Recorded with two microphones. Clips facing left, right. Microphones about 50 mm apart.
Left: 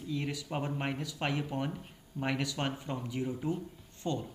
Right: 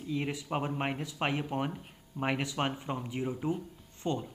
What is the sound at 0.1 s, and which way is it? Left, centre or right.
Speech, right.